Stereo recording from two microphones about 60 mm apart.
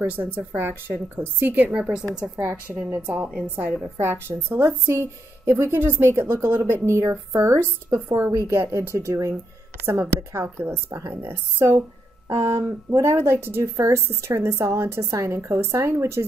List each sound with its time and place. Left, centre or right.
0.0 s a woman's voice: right
1.7 s a woman's voice: centre
3.8 s a woman's voice: right
10.4 s a woman's voice: right
10.9 s speech: right
11.2 s a woman's voice: right
12.3 s a woman's voice: right